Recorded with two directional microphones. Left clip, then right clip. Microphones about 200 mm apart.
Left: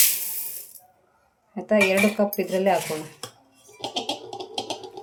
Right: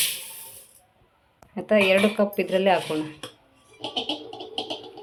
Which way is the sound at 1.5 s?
Centre (ahead or behind).